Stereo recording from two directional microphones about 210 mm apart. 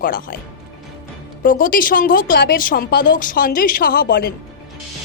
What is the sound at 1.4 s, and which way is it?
Speech, 40° left (ahead or behind).